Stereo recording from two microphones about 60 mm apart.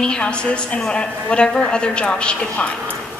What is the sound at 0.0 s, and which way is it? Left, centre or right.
A woman's voice, centre.